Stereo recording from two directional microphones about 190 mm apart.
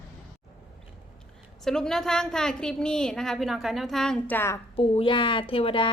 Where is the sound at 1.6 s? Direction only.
Centre (ahead or behind).